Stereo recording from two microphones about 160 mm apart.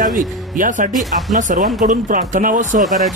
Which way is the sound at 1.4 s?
50° right (ahead or behind).